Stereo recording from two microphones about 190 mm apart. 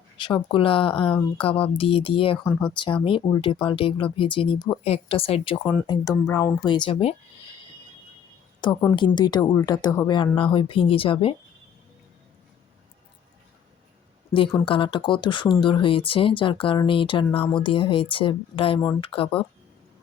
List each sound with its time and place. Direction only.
0.2 s speech: 25° left (ahead or behind)
2.4 s speech: 10° left (ahead or behind)
2.7 s speech: 25° left (ahead or behind)
8.6 s speech: 20° left (ahead or behind)
14.6 s speech: 25° left (ahead or behind)